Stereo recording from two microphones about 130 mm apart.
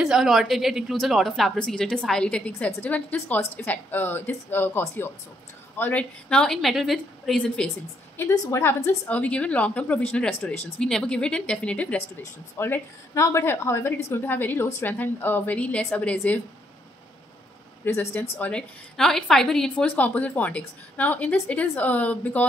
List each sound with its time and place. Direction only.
0.0 s a woman's voice: 5° right (ahead or behind)
8.5 s a woman's voice: 20° left (ahead or behind)
17.8 s a woman's voice: 20° left (ahead or behind)